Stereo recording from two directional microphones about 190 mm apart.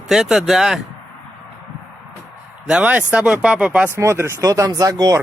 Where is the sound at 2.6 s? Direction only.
5° right (ahead or behind).